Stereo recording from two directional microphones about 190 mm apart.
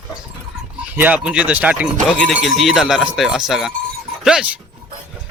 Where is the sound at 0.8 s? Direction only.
10° right (ahead or behind).